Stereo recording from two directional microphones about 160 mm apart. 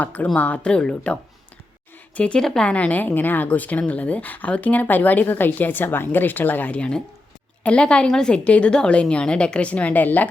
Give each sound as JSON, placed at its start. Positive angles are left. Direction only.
{"t": 0.0, "sound": "speech", "side_deg": 10}